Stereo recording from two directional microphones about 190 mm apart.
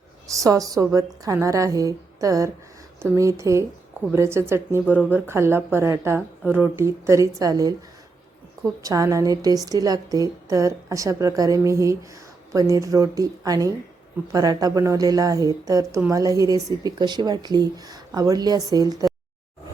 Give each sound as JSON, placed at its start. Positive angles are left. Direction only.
{"t": 0.3, "sound": "a woman's voice", "side_deg": -15}